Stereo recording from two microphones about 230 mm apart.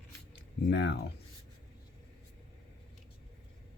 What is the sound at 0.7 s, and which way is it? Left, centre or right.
Speech, left.